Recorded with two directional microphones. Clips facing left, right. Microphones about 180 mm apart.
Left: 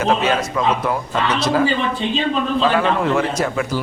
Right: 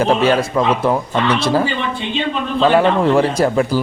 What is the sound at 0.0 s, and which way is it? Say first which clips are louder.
A man's voice: right 4 dB; 30° right (ahead or behind).